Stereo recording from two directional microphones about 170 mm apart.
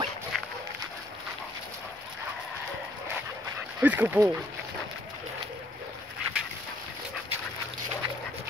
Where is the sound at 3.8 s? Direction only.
10° right (ahead or behind).